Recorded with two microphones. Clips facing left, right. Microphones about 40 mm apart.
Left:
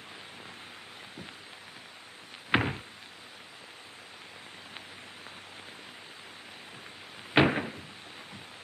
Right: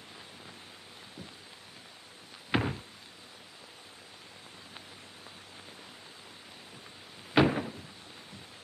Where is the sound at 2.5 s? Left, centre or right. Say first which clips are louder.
Left 3 dB; left.